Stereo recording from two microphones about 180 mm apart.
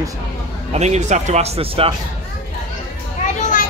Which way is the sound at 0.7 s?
40° right (ahead or behind).